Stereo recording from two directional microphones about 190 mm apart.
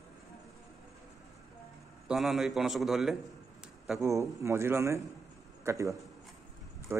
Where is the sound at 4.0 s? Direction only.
15° right (ahead or behind).